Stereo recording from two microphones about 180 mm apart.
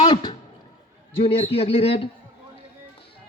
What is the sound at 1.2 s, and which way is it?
Speech, 35° left (ahead or behind).